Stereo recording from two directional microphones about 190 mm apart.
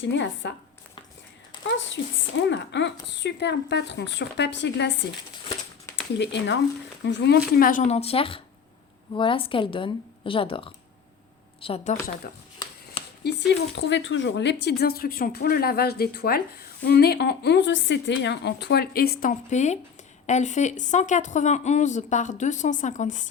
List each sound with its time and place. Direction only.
0.0 s speech: 65° left (ahead or behind)
2.5 s speech: 65° left (ahead or behind)
6.1 s a woman's voice: 65° left (ahead or behind); by 11.9 s 30° left (ahead or behind)
12.3 s speech: 55° left (ahead or behind)